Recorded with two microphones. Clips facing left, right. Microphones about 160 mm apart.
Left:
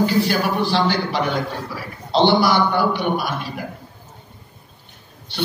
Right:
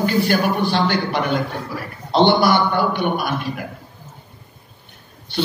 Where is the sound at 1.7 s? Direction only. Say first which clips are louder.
Right 1 dB; 55° right (ahead or behind).